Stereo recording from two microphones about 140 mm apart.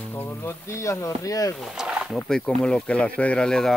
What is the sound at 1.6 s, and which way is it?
Speech, 5° right (ahead or behind).